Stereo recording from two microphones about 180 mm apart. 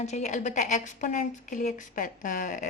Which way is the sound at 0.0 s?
40° left (ahead or behind).